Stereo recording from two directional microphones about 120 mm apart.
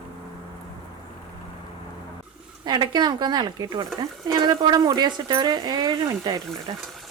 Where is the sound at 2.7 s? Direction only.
35° right (ahead or behind).